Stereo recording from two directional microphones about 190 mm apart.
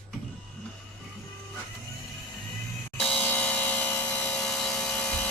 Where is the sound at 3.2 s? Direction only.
5° left (ahead or behind).